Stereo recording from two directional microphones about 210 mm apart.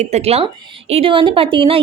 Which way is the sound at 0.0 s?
30° right (ahead or behind).